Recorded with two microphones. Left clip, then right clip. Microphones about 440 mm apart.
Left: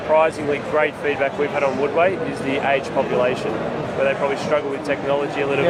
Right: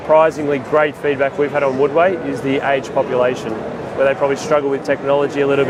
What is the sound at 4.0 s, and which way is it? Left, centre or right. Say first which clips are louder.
Speech: right 5 dB; right.